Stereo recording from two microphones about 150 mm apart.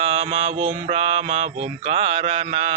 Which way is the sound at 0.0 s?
40° right (ahead or behind).